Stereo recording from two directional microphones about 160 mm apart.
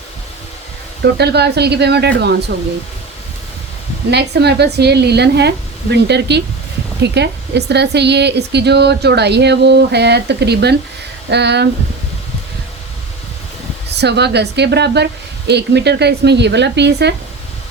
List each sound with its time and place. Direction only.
1.0 s a woman's voice: 90° right
4.1 s a woman's voice: 90° right
13.9 s a woman's voice: 90° right